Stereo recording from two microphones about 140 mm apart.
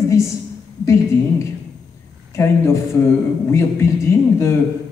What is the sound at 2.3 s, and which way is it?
Speech, 20° left (ahead or behind).